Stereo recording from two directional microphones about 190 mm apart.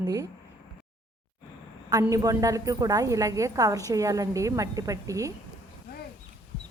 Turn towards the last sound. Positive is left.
turn(degrees=-15)  # may be behind; listen again after turning